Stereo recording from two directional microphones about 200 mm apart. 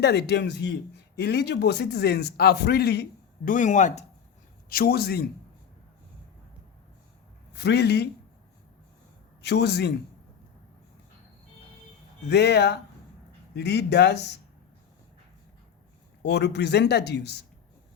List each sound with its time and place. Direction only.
0.0 s speech: 55° left (ahead or behind); by 4.0 s 35° left (ahead or behind)
4.7 s speech: 50° left (ahead or behind)
7.5 s speech: 55° left (ahead or behind)
9.4 s speech: 55° left (ahead or behind)
12.3 s speech: 55° left (ahead or behind)
16.2 s speech: 55° left (ahead or behind)